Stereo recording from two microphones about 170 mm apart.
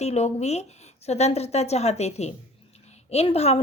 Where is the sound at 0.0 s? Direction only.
40° left (ahead or behind).